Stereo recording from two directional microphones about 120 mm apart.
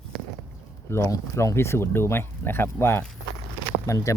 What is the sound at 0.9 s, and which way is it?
Speech, 20° left (ahead or behind).